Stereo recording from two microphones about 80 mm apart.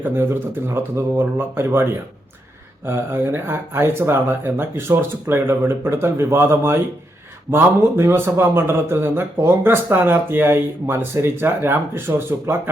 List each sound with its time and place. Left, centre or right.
0.0 s speech: right